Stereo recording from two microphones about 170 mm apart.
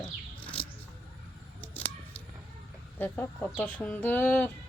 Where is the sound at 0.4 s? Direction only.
10° left (ahead or behind).